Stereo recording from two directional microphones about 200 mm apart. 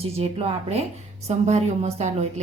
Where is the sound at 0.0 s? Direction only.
30° right (ahead or behind).